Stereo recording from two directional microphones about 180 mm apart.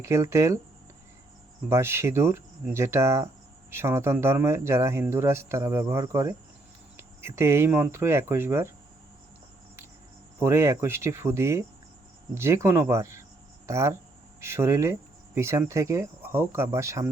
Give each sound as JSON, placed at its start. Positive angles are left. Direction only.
{"t": 0.0, "sound": "speech", "side_deg": -15}
{"t": 1.7, "sound": "speech", "side_deg": -15}
{"t": 10.4, "sound": "speech", "side_deg": -15}